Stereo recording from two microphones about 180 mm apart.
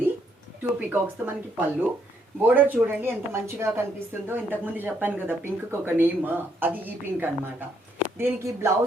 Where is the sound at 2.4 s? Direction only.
10° right (ahead or behind).